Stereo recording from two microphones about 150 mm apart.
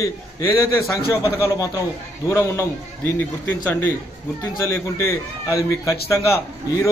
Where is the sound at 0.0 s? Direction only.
20° left (ahead or behind).